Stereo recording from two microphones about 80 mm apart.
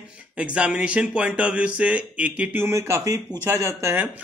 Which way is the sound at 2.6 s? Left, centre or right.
Right.